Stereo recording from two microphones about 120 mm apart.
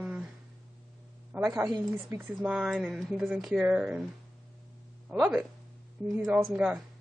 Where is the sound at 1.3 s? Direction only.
10° right (ahead or behind).